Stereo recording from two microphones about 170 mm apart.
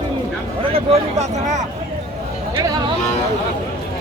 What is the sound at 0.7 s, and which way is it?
Speech, 40° right (ahead or behind).